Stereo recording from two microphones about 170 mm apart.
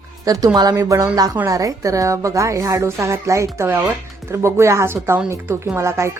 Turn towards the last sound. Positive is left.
turn(degrees=-15)  # may be behind; listen again after turning